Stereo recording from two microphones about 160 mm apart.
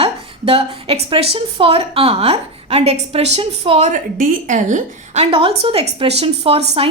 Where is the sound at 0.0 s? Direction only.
35° right (ahead or behind).